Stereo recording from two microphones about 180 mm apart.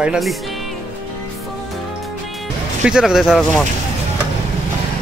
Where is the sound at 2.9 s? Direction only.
5° right (ahead or behind).